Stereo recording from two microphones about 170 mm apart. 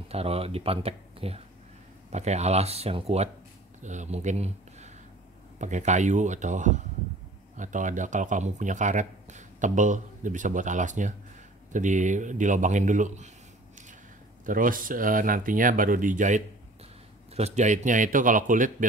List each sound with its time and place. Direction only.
0.1 s speech: 35° right (ahead or behind)
14.4 s speech: 55° right (ahead or behind)